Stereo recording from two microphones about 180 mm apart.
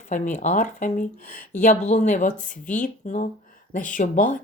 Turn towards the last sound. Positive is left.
turn(degrees=45)  # may be behind; listen again after turning